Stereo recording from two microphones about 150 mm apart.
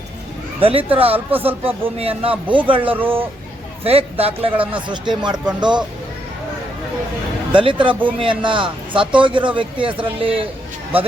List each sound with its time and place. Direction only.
0.6 s a man's voice: 40° right (ahead or behind)
2.9 s speech: 15° right (ahead or behind)
3.8 s a man's voice: 40° right (ahead or behind)
7.5 s a man's voice: 35° right (ahead or behind)